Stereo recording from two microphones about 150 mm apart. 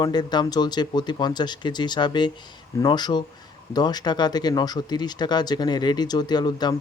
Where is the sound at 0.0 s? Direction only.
30° left (ahead or behind).